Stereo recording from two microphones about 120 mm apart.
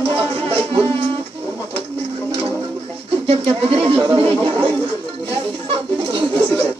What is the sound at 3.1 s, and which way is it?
Speech, 55° right (ahead or behind).